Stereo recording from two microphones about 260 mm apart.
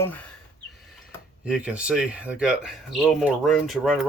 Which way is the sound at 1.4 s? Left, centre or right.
Centre.